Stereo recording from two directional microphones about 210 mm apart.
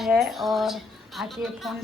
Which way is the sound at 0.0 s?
Centre (ahead or behind).